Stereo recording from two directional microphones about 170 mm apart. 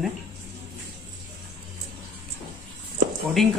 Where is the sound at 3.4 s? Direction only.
Centre (ahead or behind).